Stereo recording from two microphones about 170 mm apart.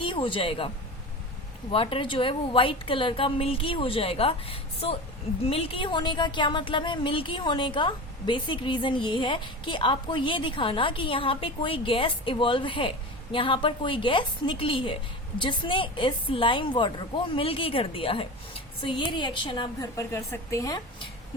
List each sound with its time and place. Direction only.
0.0 s speech: 30° left (ahead or behind)
1.7 s a woman's voice: 30° left (ahead or behind)